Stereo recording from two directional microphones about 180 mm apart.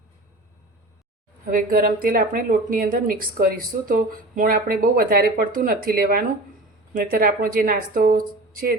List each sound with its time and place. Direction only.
1.5 s a woman's voice: 50° right (ahead or behind)